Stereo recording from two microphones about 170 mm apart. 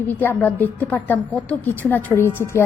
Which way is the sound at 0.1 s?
10° left (ahead or behind).